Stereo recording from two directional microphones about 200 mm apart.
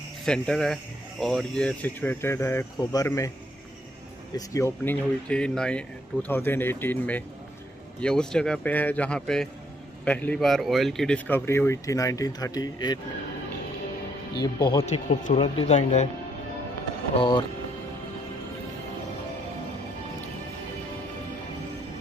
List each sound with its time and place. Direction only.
0.2 s speech: 5° left (ahead or behind)
4.4 s speech: 15° left (ahead or behind)
14.4 s speech: 20° left (ahead or behind)
14.9 s speech: 35° left (ahead or behind)
17.2 s speech: 20° left (ahead or behind)